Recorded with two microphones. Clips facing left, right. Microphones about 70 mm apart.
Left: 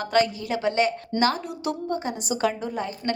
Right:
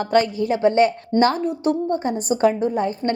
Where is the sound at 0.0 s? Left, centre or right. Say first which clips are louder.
Right 4 dB; right.